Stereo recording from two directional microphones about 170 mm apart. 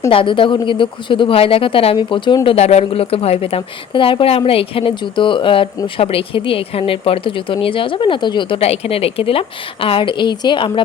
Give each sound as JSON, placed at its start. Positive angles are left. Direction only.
{"t": 0.1, "sound": "a woman's voice", "side_deg": 30}